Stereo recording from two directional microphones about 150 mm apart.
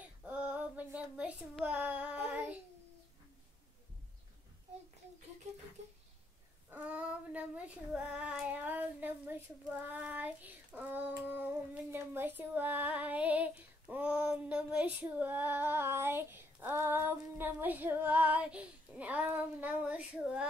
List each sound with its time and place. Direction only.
0.0 s child singing: 10° right (ahead or behind)
5.8 s a sound: 50° right (ahead or behind)
6.7 s child singing: 5° right (ahead or behind)